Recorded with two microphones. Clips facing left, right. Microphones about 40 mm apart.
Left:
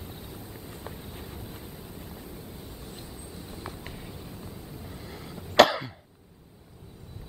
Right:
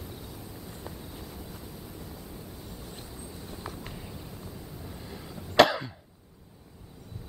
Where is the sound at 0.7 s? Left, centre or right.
Left.